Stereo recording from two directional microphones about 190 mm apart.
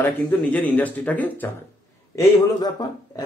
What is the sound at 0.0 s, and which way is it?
Speech, 5° left (ahead or behind).